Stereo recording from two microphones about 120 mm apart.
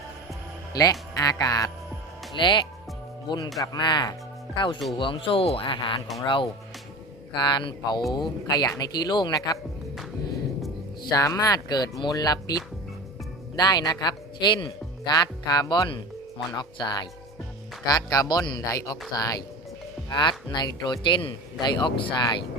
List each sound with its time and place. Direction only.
0.7 s speech: 30° left (ahead or behind)
2.3 s speech: 40° left (ahead or behind)
11.1 s speech: 30° left (ahead or behind); by 22.1 s 45° left (ahead or behind)